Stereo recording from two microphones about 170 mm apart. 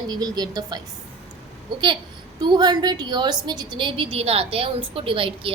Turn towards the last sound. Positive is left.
turn(degrees=-30)  # may be behind; listen again after turning